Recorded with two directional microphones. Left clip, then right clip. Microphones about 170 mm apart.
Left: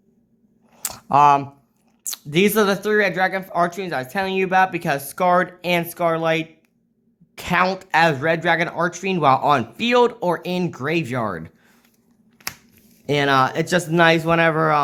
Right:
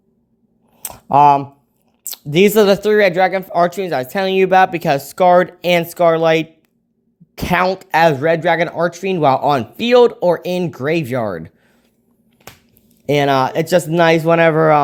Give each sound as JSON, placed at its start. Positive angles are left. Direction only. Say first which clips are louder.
{"t": 0.7, "sound": "a sound", "louder": "left 1 dB", "side_deg": -10}
{"t": 0.9, "sound": "a woman's voice", "louder": "right 4 dB", "side_deg": -20}
{"t": 7.6, "sound": "speech", "louder": "right 2 dB", "side_deg": -15}
{"t": 7.9, "sound": "speech", "louder": "right 7 dB", "side_deg": -30}
{"t": 13.1, "sound": "speech", "louder": "right 3 dB", "side_deg": -35}